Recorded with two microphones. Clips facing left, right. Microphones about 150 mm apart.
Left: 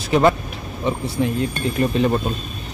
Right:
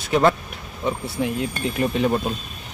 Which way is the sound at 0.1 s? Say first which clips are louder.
Left 2 dB; 5° left (ahead or behind).